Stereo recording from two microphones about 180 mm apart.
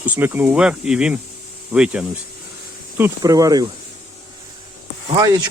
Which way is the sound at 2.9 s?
15° right (ahead or behind).